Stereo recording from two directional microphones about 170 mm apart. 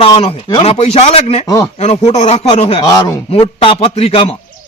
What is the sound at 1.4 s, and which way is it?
Speech, 20° left (ahead or behind).